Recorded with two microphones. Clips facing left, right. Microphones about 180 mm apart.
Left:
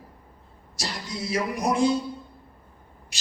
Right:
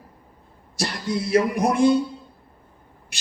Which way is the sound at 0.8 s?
60° right (ahead or behind).